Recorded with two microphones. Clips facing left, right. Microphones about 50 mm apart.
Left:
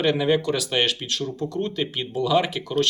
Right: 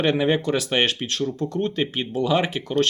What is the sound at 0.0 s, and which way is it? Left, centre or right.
Speech, right.